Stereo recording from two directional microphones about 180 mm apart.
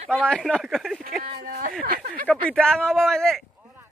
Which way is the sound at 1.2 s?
55° right (ahead or behind).